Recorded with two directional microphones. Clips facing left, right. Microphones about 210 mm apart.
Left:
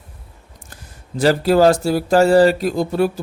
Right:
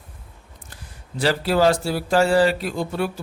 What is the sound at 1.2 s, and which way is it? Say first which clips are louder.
A man's voice: left 5 dB; 45° left (ahead or behind).